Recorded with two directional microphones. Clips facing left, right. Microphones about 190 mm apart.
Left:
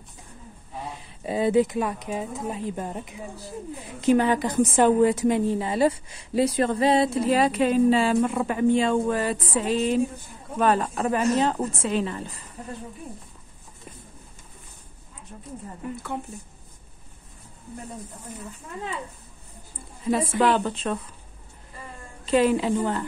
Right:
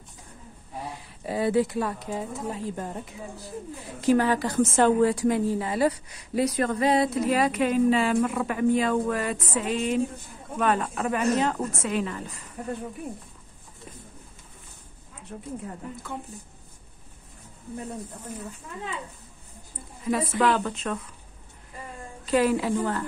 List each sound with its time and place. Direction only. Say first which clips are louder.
1.2 s a woman's voice: left 3 dB; 20° left (ahead or behind)
15.3 s a woman's voice: right 5 dB; 80° right
19.7 s a woman's voice: left 2 dB; 30° left (ahead or behind)
22.2 s a woman's voice: left 2 dB; 25° left (ahead or behind)